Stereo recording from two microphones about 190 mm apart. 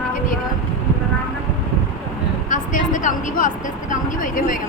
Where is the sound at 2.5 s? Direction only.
45° left (ahead or behind).